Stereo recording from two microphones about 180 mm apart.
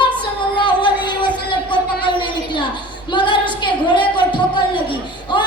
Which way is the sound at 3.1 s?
25° left (ahead or behind).